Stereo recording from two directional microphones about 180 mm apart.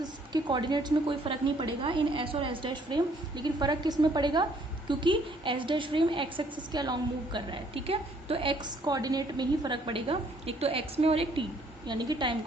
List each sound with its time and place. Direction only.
0.0 s a woman's voice: 25° right (ahead or behind)